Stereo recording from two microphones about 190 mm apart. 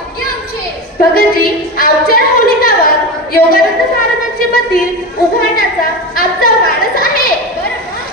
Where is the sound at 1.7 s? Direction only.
50° left (ahead or behind).